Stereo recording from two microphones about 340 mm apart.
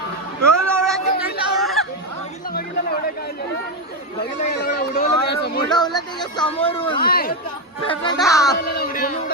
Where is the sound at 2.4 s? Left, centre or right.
Left.